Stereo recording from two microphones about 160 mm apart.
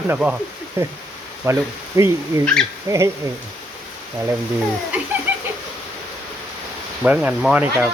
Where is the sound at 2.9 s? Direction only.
15° right (ahead or behind).